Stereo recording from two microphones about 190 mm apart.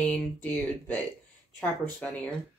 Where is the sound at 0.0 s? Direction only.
5° left (ahead or behind).